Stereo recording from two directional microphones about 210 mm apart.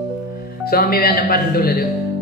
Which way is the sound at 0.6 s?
45° left (ahead or behind).